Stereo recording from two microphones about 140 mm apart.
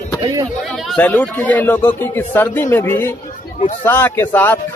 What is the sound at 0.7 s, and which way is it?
Speech, 5° left (ahead or behind).